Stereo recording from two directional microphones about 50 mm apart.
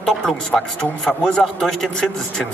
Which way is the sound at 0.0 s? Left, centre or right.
Centre.